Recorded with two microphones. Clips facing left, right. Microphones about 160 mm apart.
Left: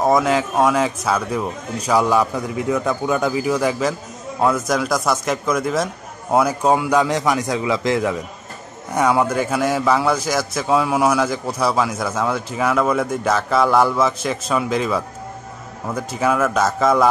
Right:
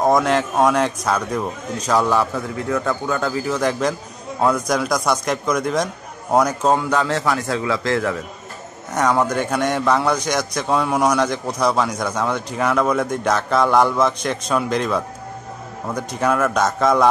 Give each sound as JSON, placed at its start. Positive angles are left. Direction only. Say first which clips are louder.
{"t": 0.0, "sound": "a man's voice", "louder": "even", "side_deg": 5}